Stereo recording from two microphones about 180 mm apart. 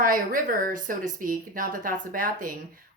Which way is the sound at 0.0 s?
50° right (ahead or behind).